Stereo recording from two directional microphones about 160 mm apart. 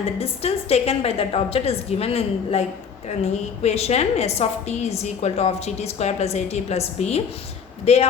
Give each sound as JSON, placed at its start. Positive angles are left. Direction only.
{"t": 0.0, "sound": "a woman's voice", "side_deg": 40}